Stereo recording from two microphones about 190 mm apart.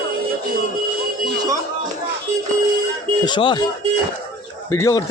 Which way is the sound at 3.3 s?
25° left (ahead or behind).